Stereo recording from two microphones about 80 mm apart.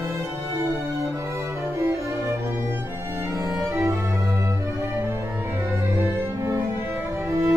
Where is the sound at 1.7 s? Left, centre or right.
Right.